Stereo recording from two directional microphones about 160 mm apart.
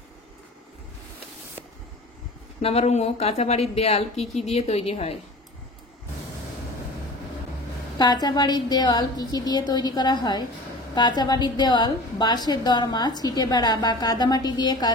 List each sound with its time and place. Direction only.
2.6 s speech: 40° left (ahead or behind)
8.0 s a woman's voice: 25° left (ahead or behind)